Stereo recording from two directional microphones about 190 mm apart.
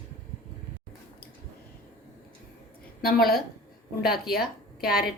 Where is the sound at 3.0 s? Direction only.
55° left (ahead or behind).